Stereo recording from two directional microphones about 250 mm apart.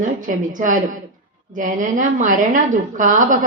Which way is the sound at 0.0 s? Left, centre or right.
Right.